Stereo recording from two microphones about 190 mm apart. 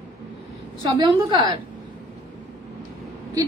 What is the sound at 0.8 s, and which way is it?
Speech, 25° right (ahead or behind).